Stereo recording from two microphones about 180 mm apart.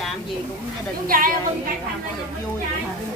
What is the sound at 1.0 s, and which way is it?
Speech, 50° right (ahead or behind).